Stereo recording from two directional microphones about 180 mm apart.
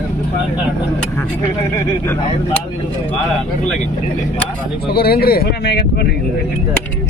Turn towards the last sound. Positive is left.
turn(degrees=70)  # may be behind; listen again after turning